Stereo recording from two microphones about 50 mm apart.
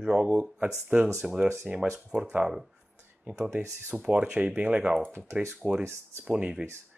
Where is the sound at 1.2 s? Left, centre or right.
Centre.